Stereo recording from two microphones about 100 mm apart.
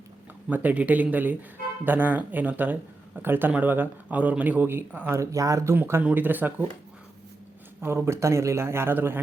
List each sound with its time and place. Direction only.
0.5 s a man's voice: 15° right (ahead or behind); by 5.7 s 30° right (ahead or behind)
5.7 s a man's voice: 20° right (ahead or behind)
7.8 s a man's voice: 25° right (ahead or behind)